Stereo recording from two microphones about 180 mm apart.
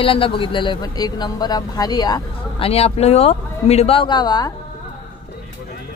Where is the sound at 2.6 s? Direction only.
35° left (ahead or behind).